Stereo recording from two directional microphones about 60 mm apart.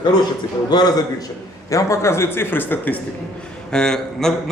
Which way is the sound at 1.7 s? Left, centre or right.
Left.